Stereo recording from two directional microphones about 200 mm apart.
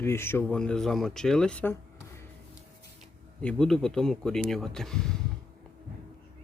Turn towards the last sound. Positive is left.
turn(degrees=5)  # may be behind; listen again after turning